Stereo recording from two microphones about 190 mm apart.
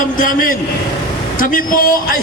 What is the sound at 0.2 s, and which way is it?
A man's voice, 45° left (ahead or behind).